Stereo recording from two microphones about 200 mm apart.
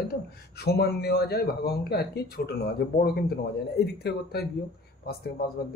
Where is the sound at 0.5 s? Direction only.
50° left (ahead or behind).